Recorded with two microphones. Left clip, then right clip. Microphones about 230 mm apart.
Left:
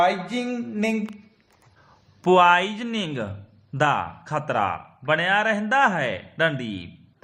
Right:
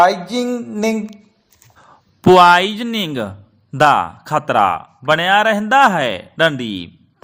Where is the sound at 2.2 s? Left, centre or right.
Right.